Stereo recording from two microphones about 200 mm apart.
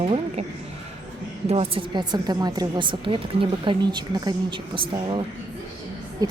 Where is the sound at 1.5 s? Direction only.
30° right (ahead or behind).